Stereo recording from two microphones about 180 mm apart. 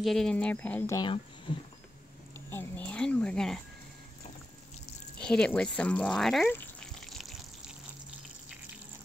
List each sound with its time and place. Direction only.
0.0 s speech: centre (ahead or behind)
0.9 s speech: 25° left (ahead or behind)
2.5 s speech: 10° left (ahead or behind)
5.2 s a sound: 5° left (ahead or behind)